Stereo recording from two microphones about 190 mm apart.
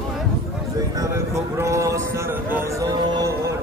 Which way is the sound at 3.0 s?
20° right (ahead or behind).